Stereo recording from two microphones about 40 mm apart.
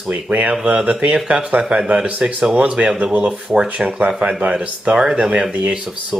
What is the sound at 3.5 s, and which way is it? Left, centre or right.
Speech, right.